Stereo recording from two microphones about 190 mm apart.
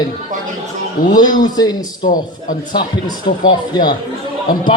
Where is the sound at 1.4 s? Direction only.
20° left (ahead or behind).